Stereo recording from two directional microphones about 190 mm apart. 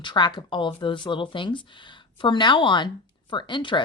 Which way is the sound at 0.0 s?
25° left (ahead or behind).